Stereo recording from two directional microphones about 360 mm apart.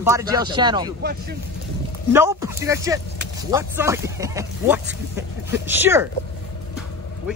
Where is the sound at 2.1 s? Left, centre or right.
Centre.